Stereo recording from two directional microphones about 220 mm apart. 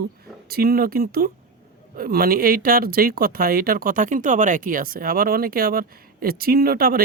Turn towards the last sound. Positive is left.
turn(degrees=-40)  # may be behind; listen again after turning